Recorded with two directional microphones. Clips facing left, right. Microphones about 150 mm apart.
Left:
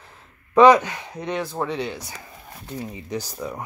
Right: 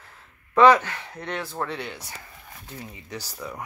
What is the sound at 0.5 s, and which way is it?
Speech, 15° left (ahead or behind).